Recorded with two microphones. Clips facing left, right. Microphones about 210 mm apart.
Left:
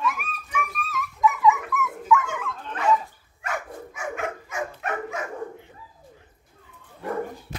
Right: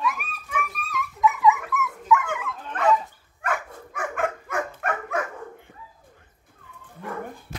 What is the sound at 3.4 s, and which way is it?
Dog, 55° right (ahead or behind).